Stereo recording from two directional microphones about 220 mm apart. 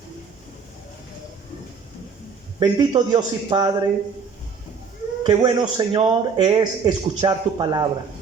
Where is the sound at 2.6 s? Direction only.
20° right (ahead or behind).